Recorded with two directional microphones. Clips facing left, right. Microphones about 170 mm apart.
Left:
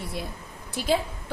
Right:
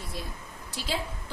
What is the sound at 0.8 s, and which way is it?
Speech, 55° left (ahead or behind).